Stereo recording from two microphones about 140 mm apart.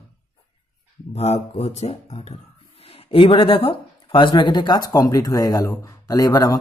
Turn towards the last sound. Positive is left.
turn(degrees=25)  # may be behind; listen again after turning